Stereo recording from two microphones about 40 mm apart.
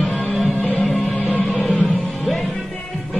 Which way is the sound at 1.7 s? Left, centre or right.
Centre.